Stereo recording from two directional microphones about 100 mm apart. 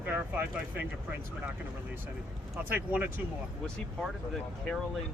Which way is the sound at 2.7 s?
20° right (ahead or behind).